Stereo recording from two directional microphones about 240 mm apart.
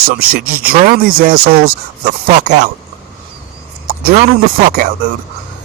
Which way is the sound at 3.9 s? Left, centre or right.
Right.